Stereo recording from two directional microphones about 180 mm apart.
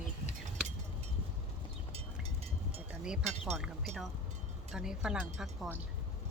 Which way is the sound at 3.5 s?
Centre (ahead or behind).